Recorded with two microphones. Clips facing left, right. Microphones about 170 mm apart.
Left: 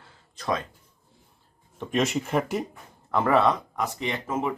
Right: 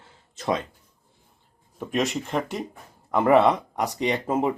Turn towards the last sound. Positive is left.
turn(degrees=-35)  # may be behind; listen again after turning